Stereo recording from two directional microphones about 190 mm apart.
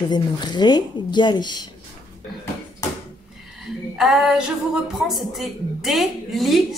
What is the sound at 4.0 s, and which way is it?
A woman's voice, centre (ahead or behind).